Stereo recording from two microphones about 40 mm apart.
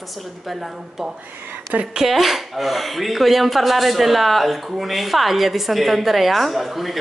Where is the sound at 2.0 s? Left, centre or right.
Centre.